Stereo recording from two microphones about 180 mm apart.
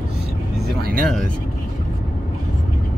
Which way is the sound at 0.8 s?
55° right (ahead or behind).